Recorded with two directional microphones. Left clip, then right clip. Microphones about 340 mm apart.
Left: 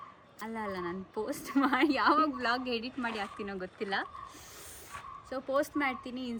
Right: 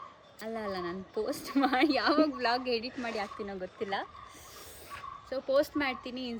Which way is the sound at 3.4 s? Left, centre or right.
Left.